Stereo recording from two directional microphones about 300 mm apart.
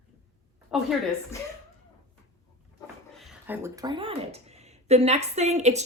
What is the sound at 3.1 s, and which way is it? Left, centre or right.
Speech, centre.